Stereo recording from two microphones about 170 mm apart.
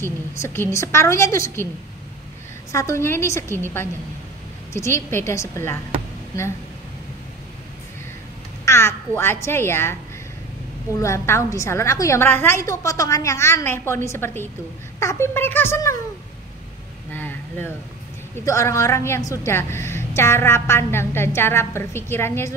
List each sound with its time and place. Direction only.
0.0 s a woman's voice: 15° left (ahead or behind)
2.7 s a woman's voice: 15° left (ahead or behind)
8.6 s speech: 15° left (ahead or behind)
11.0 s a woman's voice: 15° left (ahead or behind)
17.1 s a sound: 10° left (ahead or behind)
18.4 s a woman's voice: 15° left (ahead or behind)